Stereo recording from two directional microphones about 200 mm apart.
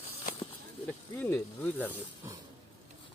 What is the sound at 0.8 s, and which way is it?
Snake, 10° left (ahead or behind).